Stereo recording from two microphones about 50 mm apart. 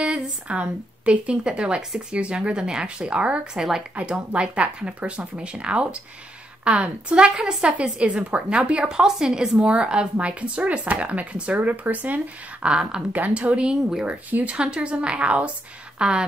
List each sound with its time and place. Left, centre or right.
0.0 s speech: right
12.6 s speech: centre
13.1 s speech: right